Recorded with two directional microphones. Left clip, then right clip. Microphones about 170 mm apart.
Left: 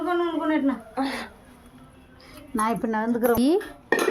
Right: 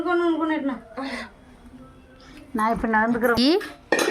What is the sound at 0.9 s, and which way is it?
Speech, 55° left (ahead or behind).